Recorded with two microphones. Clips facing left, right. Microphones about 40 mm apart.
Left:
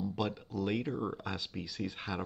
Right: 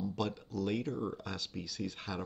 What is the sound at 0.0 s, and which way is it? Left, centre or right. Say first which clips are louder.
Speech: left 1 dB; centre.